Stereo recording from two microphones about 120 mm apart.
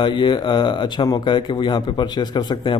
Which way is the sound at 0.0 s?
40° left (ahead or behind).